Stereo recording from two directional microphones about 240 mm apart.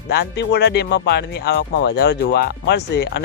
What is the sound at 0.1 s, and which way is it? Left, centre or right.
Speech, left.